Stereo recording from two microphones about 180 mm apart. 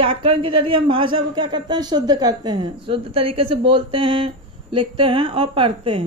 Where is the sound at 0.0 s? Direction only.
30° right (ahead or behind).